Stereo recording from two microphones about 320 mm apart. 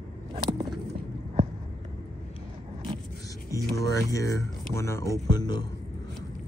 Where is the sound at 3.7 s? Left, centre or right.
Centre.